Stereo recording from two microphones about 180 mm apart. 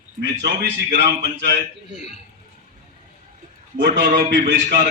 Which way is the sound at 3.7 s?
70° right (ahead or behind).